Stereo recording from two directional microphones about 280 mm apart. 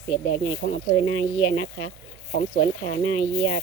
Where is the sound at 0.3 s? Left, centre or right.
Left.